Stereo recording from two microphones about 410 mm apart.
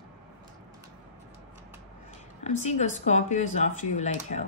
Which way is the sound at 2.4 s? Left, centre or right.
Centre.